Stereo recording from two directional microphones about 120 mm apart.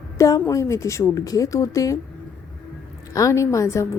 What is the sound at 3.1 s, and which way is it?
Speech, 25° left (ahead or behind).